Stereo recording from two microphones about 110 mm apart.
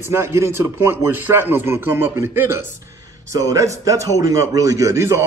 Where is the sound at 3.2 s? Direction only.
30° right (ahead or behind).